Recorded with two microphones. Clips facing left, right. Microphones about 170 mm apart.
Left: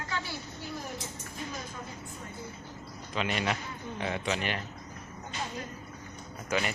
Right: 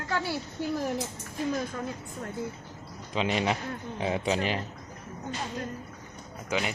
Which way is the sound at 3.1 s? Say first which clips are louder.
Right 4 dB; 25° right (ahead or behind).